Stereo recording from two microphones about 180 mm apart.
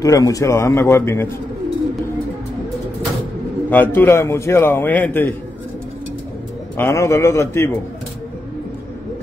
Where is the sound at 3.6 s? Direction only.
10° left (ahead or behind).